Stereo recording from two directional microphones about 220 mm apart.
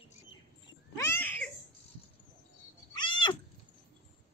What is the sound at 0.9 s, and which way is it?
Cat, 10° left (ahead or behind).